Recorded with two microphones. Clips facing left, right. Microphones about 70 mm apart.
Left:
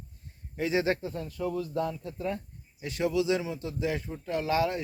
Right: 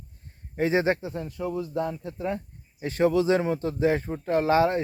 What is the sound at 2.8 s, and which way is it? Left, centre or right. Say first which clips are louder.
A man's voice: right 6 dB; right.